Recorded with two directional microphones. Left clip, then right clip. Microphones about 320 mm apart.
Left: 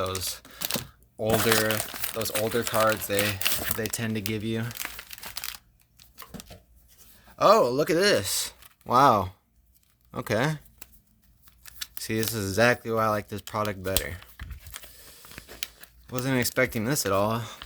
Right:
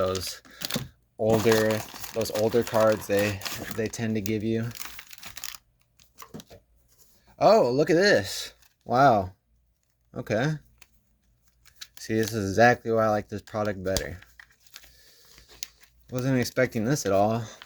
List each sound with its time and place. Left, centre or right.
0.0 s typing: centre
2.1 s speech: centre
3.3 s speech: left
3.8 s speech: centre
7.3 s speech: centre
11.9 s speech: centre